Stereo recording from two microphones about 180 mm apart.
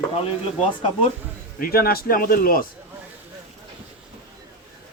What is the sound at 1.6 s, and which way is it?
Speech, 55° left (ahead or behind).